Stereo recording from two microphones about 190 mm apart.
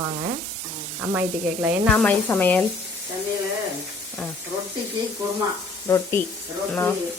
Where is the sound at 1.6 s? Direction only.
10° right (ahead or behind).